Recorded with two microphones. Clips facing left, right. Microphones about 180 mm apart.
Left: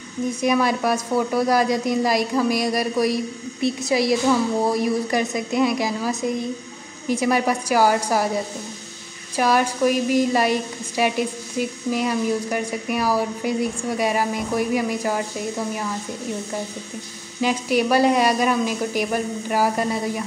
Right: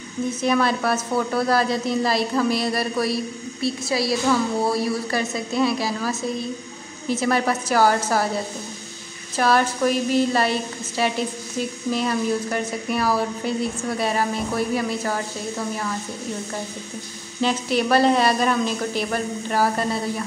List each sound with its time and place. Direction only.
0.3 s a woman's voice: 15° left (ahead or behind)
9.4 s a woman's voice: 10° left (ahead or behind)
17.4 s a woman's voice: 10° left (ahead or behind)